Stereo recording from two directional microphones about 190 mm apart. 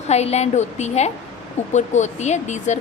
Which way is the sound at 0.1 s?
35° left (ahead or behind).